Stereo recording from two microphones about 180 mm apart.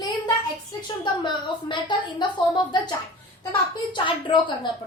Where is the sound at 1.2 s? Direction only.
25° left (ahead or behind).